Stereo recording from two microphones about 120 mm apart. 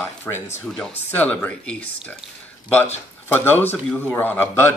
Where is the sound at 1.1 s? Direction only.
15° left (ahead or behind).